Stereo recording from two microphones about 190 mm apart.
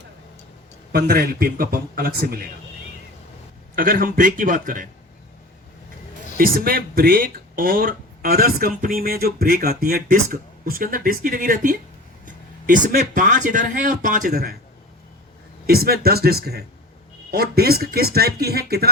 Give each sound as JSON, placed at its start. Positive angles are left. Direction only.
{"t": 0.9, "sound": "speech", "side_deg": -55}
{"t": 3.8, "sound": "speech", "side_deg": -50}
{"t": 6.3, "sound": "speech", "side_deg": -50}
{"t": 15.6, "sound": "speech", "side_deg": -55}